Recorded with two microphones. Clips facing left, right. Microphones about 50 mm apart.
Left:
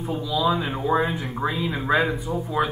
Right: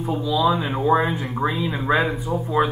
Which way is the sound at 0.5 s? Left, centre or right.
Centre.